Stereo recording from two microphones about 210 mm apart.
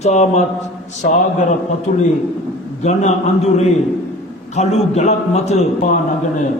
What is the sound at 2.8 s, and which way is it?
A man's voice, 35° left (ahead or behind).